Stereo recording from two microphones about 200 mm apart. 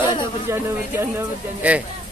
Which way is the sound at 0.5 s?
10° right (ahead or behind).